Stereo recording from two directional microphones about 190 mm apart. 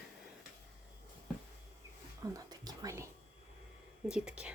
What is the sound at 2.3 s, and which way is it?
Whispering, 20° right (ahead or behind).